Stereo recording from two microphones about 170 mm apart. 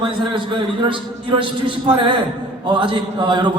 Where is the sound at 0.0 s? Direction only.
30° right (ahead or behind).